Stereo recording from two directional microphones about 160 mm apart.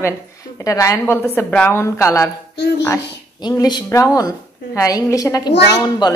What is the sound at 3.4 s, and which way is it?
A woman's voice, 25° left (ahead or behind).